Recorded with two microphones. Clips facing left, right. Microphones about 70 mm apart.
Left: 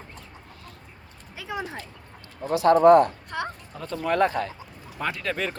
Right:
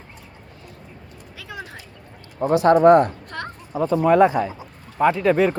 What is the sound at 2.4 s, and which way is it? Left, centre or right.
Speech, right.